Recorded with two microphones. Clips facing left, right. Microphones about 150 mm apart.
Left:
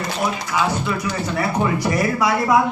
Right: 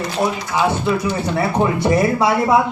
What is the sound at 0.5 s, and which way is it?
Speech, 25° right (ahead or behind).